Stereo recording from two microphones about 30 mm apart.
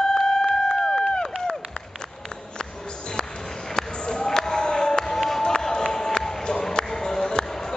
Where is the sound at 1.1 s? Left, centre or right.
Left.